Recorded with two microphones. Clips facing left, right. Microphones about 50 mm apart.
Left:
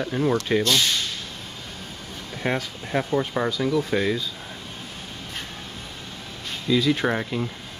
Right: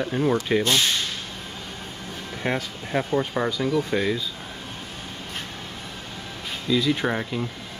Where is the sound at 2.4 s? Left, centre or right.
Centre.